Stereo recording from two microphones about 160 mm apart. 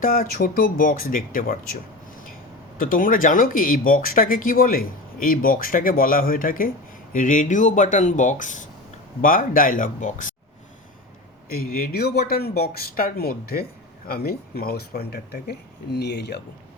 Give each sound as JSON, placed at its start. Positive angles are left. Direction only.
{"t": 0.0, "sound": "speech", "side_deg": 60}
{"t": 11.4, "sound": "speech", "side_deg": 65}